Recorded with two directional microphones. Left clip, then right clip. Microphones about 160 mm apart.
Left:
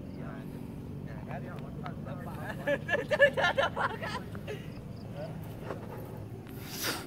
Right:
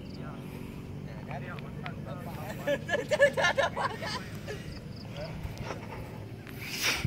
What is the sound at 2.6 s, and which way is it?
Speech, 5° right (ahead or behind).